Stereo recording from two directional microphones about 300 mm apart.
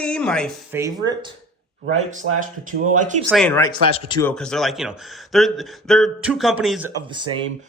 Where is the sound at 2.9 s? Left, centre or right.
Right.